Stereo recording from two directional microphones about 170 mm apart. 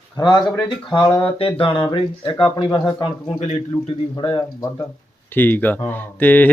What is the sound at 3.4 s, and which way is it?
A man's voice, 40° left (ahead or behind).